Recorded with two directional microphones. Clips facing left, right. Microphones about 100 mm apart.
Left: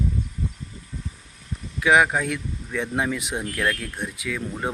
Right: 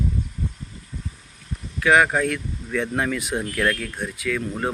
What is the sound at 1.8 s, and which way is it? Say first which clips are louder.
Speech: right 1 dB; 10° left (ahead or behind).